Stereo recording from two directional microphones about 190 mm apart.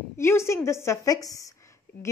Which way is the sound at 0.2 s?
15° left (ahead or behind).